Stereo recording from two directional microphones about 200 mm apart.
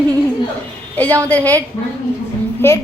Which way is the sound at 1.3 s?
5° left (ahead or behind).